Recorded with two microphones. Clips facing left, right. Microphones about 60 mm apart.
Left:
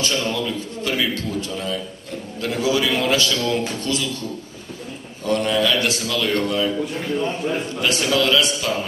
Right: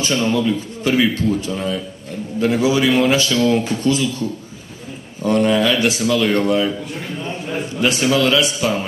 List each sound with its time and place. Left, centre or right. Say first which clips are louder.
0.0 s a man's voice: right 5 dB; centre
5.2 s a man's voice: right 4 dB; centre
7.2 s a man's voice: left 2 dB; centre